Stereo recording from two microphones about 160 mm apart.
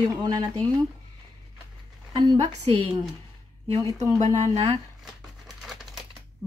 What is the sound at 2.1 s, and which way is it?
Speech, 35° right (ahead or behind).